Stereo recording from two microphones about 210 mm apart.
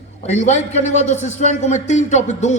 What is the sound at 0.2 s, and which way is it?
A man's voice, 35° left (ahead or behind).